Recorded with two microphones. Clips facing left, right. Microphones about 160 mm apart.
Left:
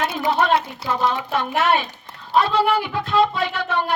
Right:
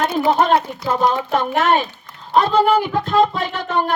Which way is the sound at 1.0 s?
45° right (ahead or behind).